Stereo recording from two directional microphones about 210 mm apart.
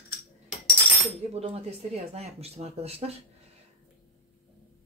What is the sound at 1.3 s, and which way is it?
Speech, 30° right (ahead or behind).